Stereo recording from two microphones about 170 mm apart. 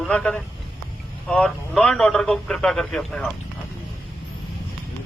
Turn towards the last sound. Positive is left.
turn(degrees=0)  # may be behind; listen again after turning